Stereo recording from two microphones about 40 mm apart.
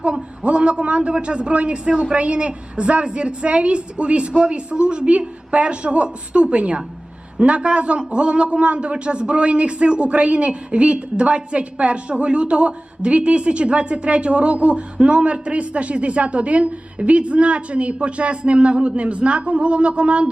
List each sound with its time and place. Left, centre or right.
0.0 s a man's voice: right